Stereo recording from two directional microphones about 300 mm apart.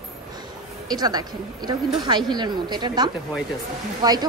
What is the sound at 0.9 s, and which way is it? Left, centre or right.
A woman's voice, centre.